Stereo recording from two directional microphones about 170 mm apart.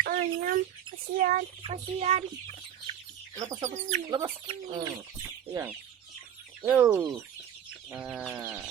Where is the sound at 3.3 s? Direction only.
20° right (ahead or behind).